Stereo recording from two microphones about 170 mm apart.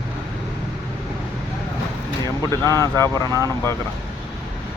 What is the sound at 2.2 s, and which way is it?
Speech, 20° left (ahead or behind).